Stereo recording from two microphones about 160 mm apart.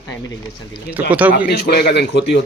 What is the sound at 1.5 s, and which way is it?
Speech, 85° left.